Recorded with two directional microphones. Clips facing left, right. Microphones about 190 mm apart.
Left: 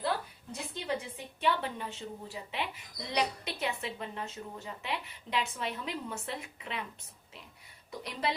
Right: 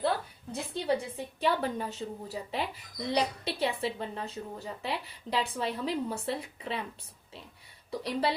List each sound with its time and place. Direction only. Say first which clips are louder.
0.7 s a woman's voice: right 6 dB; 35° right (ahead or behind)
7.9 s a woman's voice: right 6 dB; 30° right (ahead or behind)